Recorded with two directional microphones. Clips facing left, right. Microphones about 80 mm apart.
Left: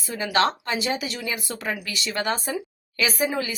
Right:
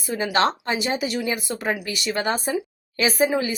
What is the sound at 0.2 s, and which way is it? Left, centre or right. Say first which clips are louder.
Speech: right 1 dB; right.